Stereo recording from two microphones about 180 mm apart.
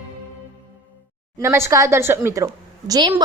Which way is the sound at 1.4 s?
15° right (ahead or behind).